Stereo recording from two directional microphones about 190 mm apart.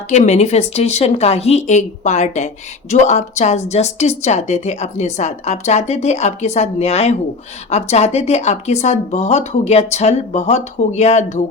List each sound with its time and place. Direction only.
0.1 s a woman's voice: 35° left (ahead or behind)